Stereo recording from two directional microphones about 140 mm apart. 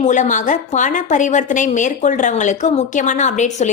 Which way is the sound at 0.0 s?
65° left (ahead or behind).